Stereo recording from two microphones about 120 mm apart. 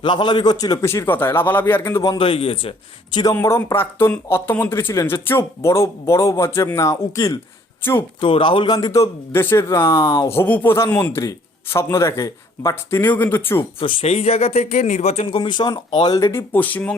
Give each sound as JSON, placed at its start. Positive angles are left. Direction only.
{"t": 0.0, "sound": "speech", "side_deg": 40}
{"t": 2.1, "sound": "a man's voice", "side_deg": 50}
{"t": 3.3, "sound": "speech", "side_deg": 20}
{"t": 8.2, "sound": "speech", "side_deg": 45}
{"t": 13.7, "sound": "speech", "side_deg": 55}
{"t": 15.4, "sound": "speech", "side_deg": 40}
{"t": 16.1, "sound": "speech", "side_deg": 20}